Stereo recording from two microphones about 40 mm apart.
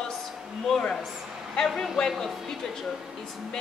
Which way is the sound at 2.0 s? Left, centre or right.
Centre.